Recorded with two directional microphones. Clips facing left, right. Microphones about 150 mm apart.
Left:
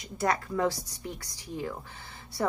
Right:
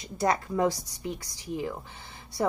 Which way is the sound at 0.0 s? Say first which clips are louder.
Right 2 dB; 20° right (ahead or behind).